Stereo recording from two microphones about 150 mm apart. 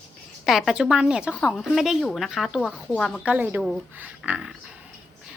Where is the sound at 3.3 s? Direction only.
10° right (ahead or behind).